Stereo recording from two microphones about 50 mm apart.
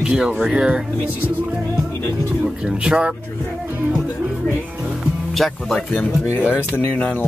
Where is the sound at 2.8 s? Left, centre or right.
Right.